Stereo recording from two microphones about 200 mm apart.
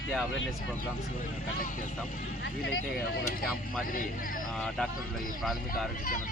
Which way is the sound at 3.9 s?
45° left (ahead or behind).